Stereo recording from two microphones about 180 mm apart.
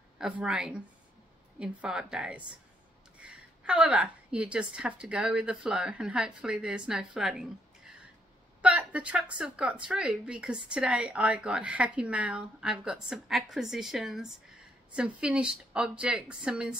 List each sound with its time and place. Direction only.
0.2 s speech: 5° right (ahead or behind)